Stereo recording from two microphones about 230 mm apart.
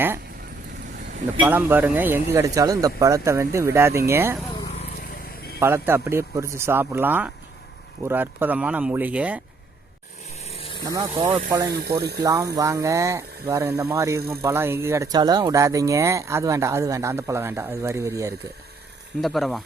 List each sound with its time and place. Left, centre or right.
1.5 s speech: centre
5.5 s speech: centre
10.4 s vehicle: left
10.8 s speech: centre
11.7 s speech: right
12.2 s speech: centre
19.2 s speech: centre